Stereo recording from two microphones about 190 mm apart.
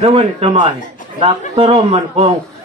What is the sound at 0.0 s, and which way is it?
A man's voice, 30° right (ahead or behind).